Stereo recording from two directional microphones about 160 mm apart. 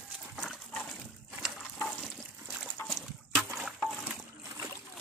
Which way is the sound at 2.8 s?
Centre (ahead or behind).